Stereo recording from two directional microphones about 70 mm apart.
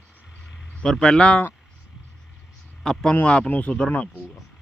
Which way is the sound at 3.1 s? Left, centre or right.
Centre.